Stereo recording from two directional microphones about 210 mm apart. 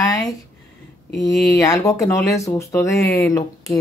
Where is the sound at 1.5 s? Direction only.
15° left (ahead or behind).